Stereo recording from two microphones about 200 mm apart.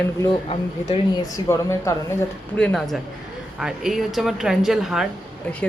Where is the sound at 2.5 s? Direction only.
5° left (ahead or behind).